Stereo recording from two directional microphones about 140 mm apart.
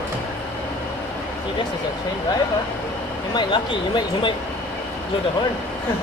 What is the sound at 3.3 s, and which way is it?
Speech, 35° left (ahead or behind).